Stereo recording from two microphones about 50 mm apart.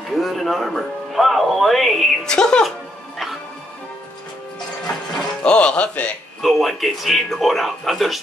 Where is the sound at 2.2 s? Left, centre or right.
Centre.